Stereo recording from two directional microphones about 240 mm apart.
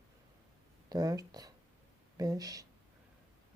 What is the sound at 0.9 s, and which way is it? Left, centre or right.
A woman's voice, centre.